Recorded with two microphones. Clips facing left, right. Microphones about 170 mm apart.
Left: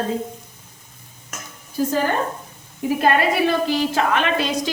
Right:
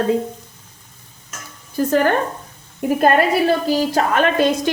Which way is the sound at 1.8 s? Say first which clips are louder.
Right 6 dB; 65° right (ahead or behind).